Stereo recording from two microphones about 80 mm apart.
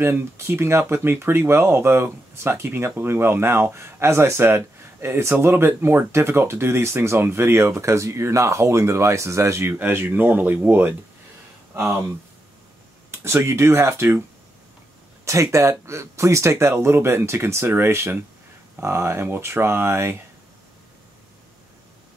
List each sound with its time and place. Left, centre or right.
0.0 s speech: right
13.1 s speech: right
15.2 s speech: right